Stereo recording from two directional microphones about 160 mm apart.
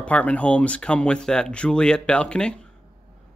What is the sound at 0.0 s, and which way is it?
Speech, 10° left (ahead or behind).